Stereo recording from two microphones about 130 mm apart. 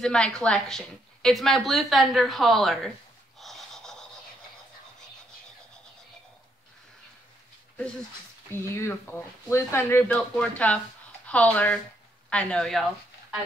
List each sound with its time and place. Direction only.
0.0 s a woman's voice: 5° left (ahead or behind)
3.3 s snort: centre (ahead or behind)
8.5 s speech: 20° left (ahead or behind); by 12.8 s 5° left (ahead or behind)